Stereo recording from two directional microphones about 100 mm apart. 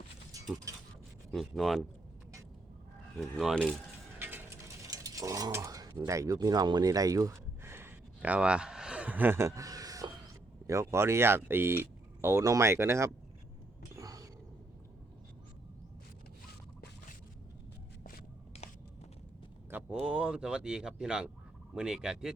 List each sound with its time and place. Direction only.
1.3 s speech: centre (ahead or behind)
3.2 s speech: 5° left (ahead or behind)
4.2 s mechanisms: 20° right (ahead or behind)
4.9 s mechanisms: 35° right (ahead or behind)
6.1 s speech: 30° right (ahead or behind)
13.9 s wild animals: 35° right (ahead or behind)
18.5 s a sound: 90° left
19.9 s a sound: 10° right (ahead or behind)
21.8 s speech: 5° right (ahead or behind)